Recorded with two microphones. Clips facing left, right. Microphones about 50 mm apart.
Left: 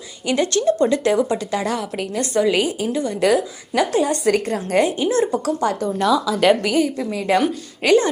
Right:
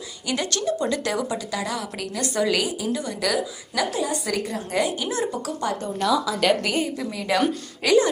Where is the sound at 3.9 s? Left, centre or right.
Left.